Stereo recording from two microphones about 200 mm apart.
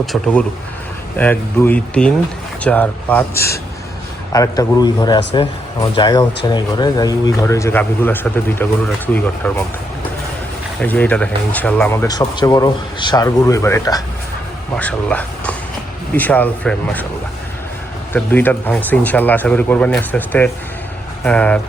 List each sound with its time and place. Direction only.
0.0 s speech: centre (ahead or behind)
10.8 s speech: 10° left (ahead or behind)
18.1 s speech: 10° left (ahead or behind)